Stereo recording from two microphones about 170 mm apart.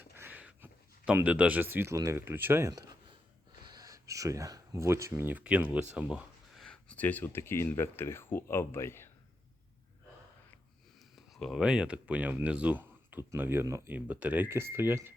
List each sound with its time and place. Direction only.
0.0 s speech: 10° right (ahead or behind); by 9.0 s 15° left (ahead or behind)
11.3 s speech: centre (ahead or behind)